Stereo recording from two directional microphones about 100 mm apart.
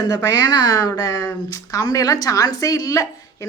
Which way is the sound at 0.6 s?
35° left (ahead or behind).